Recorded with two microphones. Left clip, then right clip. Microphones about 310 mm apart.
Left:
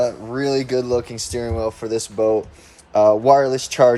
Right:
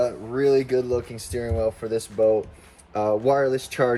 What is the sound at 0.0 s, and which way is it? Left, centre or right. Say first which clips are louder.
Speech: left 1 dB; centre.